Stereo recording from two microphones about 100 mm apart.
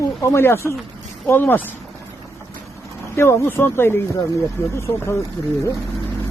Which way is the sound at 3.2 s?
25° left (ahead or behind).